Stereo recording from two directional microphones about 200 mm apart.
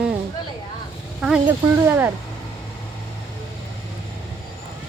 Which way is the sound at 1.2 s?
5° right (ahead or behind).